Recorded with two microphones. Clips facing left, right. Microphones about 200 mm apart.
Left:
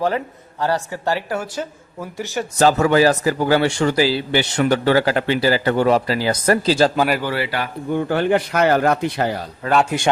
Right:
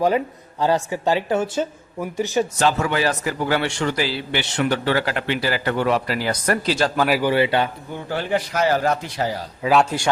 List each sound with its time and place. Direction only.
0.6 s speech: 15° right (ahead or behind)
2.6 s a man's voice: 40° left (ahead or behind)
7.1 s a man's voice: 15° right (ahead or behind)
7.9 s speech: 55° left (ahead or behind)
9.6 s speech: 10° right (ahead or behind)